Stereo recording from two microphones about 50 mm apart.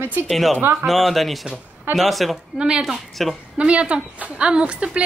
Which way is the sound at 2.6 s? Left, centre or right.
Centre.